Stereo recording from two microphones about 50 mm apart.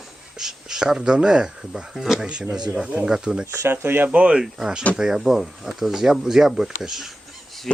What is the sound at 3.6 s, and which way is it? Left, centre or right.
Speech, right.